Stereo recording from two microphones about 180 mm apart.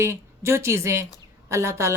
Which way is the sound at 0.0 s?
15° right (ahead or behind).